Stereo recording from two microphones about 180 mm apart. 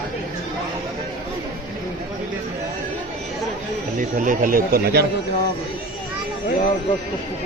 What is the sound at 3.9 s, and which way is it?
Speech, 45° right (ahead or behind).